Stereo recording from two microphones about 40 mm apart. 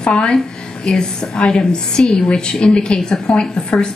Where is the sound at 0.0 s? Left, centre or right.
Left.